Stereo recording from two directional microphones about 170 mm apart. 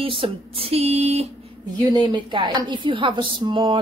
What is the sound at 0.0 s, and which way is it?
Speech, 30° right (ahead or behind).